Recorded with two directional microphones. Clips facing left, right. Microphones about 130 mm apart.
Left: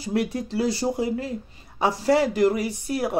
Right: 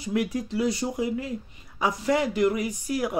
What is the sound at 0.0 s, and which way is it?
Speech, 30° left (ahead or behind).